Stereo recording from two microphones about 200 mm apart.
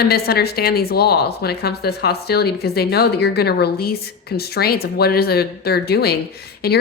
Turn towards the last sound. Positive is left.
turn(degrees=50)  # may be behind; listen again after turning